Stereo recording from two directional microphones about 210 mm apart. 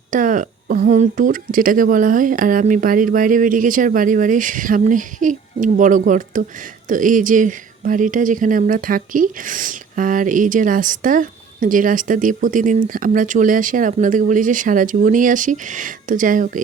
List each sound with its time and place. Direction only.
0.1 s speech: 40° right (ahead or behind)